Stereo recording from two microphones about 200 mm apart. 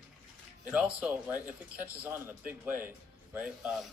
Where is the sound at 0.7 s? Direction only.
5° right (ahead or behind).